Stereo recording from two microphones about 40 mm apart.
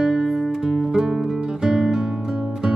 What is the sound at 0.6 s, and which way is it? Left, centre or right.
Music, centre.